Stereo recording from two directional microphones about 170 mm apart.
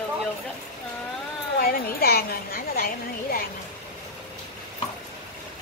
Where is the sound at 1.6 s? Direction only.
60° left (ahead or behind).